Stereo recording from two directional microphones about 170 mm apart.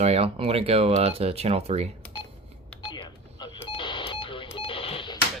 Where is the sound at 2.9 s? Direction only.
25° left (ahead or behind).